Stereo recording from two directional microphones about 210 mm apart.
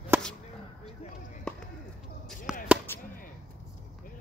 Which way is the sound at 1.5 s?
5° left (ahead or behind).